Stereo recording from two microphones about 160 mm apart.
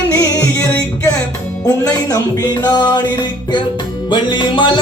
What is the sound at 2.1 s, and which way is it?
Music, 25° left (ahead or behind).